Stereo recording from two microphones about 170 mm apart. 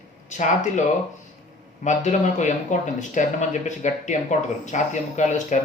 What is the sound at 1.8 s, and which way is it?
Speech, 45° left (ahead or behind).